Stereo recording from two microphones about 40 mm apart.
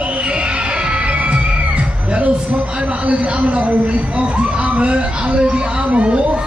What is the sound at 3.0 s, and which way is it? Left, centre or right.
A man's voice, right.